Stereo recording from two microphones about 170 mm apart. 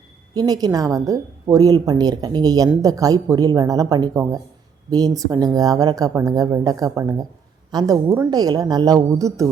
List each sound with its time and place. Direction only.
0.3 s speech: 20° right (ahead or behind)